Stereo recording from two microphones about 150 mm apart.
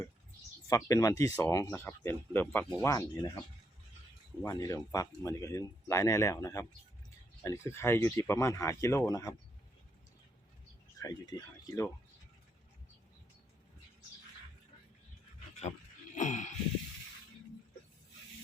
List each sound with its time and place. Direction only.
0.7 s speech: 20° left (ahead or behind)
4.4 s speech: 25° left (ahead or behind)
11.0 s speech: 25° left (ahead or behind)
16.1 s a sound: 55° left (ahead or behind)